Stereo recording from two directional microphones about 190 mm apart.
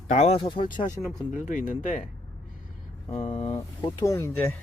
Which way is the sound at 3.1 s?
35° left (ahead or behind).